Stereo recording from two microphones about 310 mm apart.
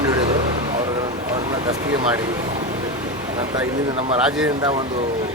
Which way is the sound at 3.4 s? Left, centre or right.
Centre.